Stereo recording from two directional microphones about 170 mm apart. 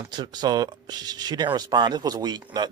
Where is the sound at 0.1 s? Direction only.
25° right (ahead or behind).